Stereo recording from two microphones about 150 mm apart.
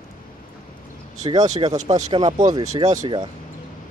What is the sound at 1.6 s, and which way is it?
Speech, 30° right (ahead or behind).